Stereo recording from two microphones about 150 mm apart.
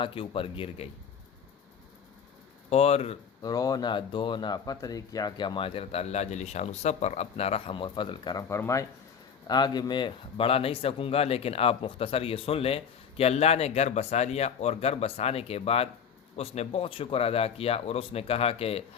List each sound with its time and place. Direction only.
0.0 s speech: 35° left (ahead or behind)
2.6 s speech: 45° left (ahead or behind)
3.4 s speech: 25° left (ahead or behind)
8.4 s speech: 20° left (ahead or behind); by 18.8 s 40° left (ahead or behind)